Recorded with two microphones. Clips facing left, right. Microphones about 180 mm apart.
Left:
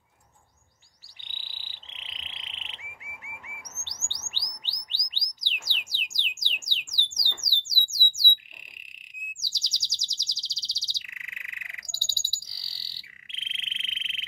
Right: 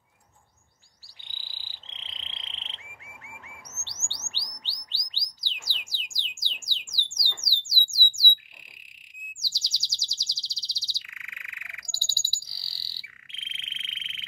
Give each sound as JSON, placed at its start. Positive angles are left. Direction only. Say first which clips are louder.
{"t": 1.2, "sound": "frog", "louder": "even", "side_deg": 20}
{"t": 3.4, "sound": "chirp", "louder": "even", "side_deg": 15}
{"t": 4.6, "sound": "bird", "louder": "even", "side_deg": 15}
{"t": 6.6, "sound": "a sound", "louder": "left 2 dB", "side_deg": 20}
{"t": 9.4, "sound": "bird", "louder": "right 1 dB", "side_deg": 20}